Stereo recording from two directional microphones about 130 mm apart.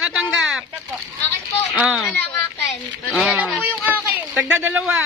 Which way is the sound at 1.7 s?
10° right (ahead or behind).